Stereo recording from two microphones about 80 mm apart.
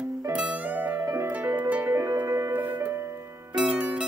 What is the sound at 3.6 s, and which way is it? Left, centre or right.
Zither, centre.